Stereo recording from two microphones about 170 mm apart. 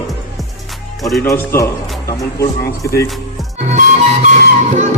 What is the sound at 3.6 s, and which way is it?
Music, 40° right (ahead or behind).